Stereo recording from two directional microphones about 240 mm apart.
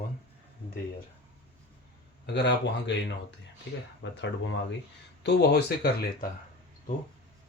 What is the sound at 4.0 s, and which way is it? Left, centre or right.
Speech, left.